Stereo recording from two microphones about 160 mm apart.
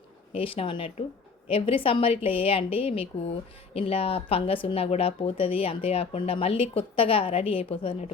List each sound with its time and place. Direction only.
0.3 s speech: 35° left (ahead or behind)